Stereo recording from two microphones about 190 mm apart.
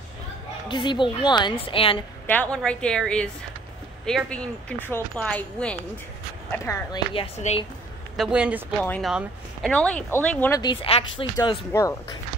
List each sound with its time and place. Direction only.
0.7 s a woman's voice: 25° left (ahead or behind)
2.2 s speech: 10° left (ahead or behind)
6.6 s speech: 15° left (ahead or behind)
7.2 s speech: 35° left (ahead or behind)
8.2 s speech: 5° right (ahead or behind)
8.7 s speech: 5° left (ahead or behind)
10.6 s a woman's voice: 25° left (ahead or behind)
11.7 s speech: 15° left (ahead or behind)